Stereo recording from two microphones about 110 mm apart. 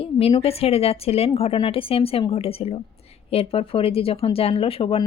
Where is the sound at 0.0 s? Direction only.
60° left (ahead or behind).